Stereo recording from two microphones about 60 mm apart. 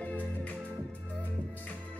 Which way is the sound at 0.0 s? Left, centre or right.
Left.